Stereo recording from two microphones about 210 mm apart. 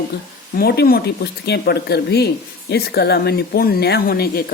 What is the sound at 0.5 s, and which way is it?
Speech, 50° left (ahead or behind).